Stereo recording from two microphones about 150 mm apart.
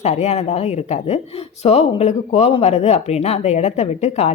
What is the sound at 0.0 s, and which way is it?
A woman's voice, 45° left (ahead or behind).